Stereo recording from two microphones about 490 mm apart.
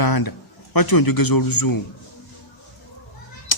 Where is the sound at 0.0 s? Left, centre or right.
Left.